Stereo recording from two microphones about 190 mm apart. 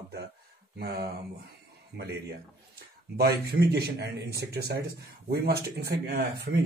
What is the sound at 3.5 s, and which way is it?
Speech, 55° right (ahead or behind).